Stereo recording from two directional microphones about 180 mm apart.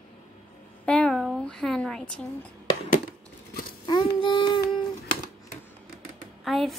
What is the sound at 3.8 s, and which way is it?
Child singing, 25° left (ahead or behind).